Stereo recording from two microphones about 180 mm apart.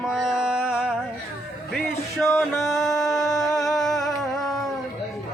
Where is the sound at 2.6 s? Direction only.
Centre (ahead or behind).